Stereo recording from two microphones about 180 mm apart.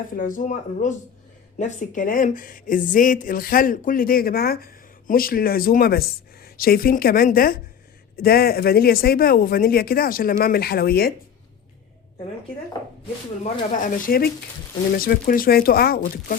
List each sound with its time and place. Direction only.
0.1 s speech: 50° left (ahead or behind)
13.8 s speech: 50° left (ahead or behind)